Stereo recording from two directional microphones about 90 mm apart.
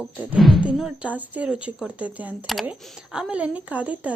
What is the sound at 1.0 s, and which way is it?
Speech, 15° right (ahead or behind).